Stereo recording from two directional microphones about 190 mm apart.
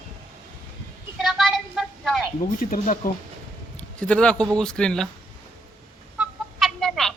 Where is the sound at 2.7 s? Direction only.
45° left (ahead or behind).